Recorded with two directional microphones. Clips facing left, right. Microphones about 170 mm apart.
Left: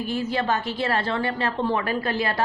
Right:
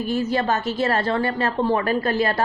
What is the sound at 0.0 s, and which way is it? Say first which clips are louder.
A woman's voice: right 3 dB; 40° right (ahead or behind).